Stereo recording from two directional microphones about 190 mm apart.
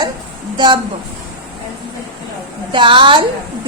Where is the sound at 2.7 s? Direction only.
25° right (ahead or behind).